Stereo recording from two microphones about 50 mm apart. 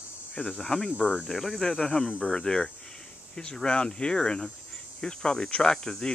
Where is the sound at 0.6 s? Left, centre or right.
Centre.